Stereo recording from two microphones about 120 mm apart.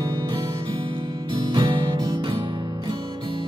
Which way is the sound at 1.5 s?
35° right (ahead or behind).